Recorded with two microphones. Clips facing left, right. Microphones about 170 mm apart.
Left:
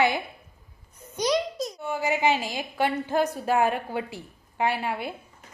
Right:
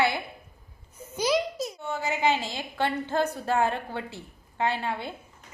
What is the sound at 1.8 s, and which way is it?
A woman's voice, 10° left (ahead or behind).